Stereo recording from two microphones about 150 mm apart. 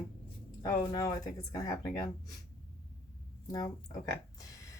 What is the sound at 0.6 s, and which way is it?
Speech, 30° left (ahead or behind).